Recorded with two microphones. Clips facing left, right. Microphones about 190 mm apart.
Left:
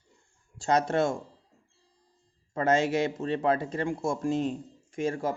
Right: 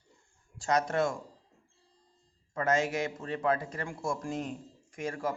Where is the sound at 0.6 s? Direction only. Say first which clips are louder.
Left 3 dB; 30° left (ahead or behind).